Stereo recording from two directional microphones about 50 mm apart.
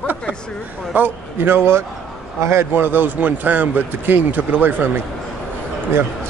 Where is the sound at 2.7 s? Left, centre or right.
Right.